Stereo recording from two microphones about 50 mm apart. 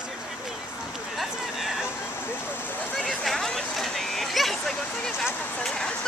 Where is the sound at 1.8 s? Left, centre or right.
Left.